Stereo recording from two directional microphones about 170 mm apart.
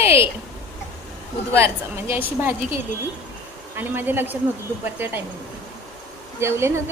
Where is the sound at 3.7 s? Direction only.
10° right (ahead or behind).